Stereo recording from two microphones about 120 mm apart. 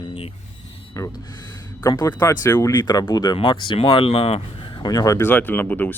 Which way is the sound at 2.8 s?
35° left (ahead or behind).